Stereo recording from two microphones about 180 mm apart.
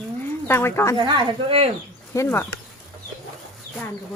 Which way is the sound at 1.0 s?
25° right (ahead or behind).